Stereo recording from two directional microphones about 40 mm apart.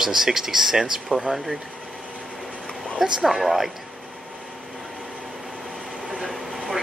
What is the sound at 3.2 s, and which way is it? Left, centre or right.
Speech, centre.